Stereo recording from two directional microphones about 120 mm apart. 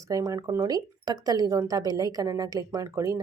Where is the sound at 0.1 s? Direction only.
30° right (ahead or behind).